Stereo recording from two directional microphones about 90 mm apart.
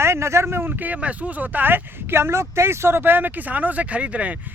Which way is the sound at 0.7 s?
15° right (ahead or behind).